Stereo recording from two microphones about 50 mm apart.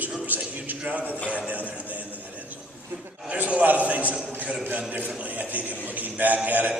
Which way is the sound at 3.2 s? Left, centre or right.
Right.